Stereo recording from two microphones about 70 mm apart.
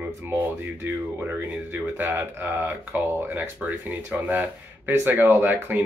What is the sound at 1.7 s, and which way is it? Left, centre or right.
Speech, right.